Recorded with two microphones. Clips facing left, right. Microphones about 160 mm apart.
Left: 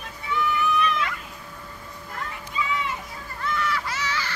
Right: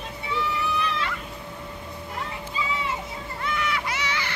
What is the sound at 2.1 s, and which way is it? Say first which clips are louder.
Music: left 1 dB; 25° right (ahead or behind).